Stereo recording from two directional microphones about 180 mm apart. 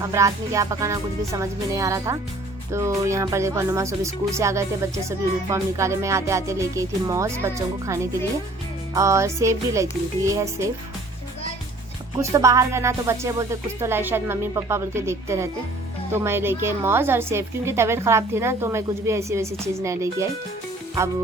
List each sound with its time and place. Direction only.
0.0 s speech: 15° right (ahead or behind)
12.1 s speech: 15° right (ahead or behind)